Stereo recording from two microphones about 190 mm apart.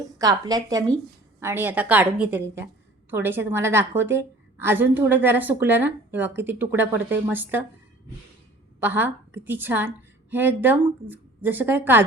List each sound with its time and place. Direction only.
0.2 s a woman's voice: 20° right (ahead or behind)
8.8 s a woman's voice: 10° right (ahead or behind)